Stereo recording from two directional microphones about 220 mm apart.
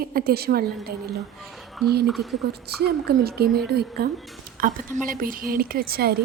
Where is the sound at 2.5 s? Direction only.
45° right (ahead or behind).